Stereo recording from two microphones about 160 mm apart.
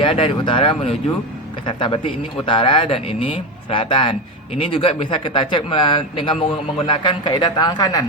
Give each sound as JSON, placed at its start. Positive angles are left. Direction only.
{"t": 0.0, "sound": "a man's voice", "side_deg": 30}